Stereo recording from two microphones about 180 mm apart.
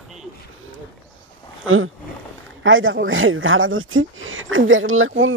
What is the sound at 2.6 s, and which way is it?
Speech, 90° right.